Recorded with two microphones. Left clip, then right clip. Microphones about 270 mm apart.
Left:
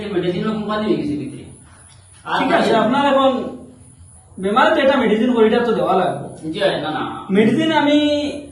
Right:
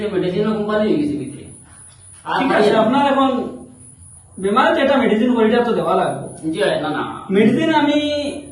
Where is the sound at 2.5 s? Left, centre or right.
Centre.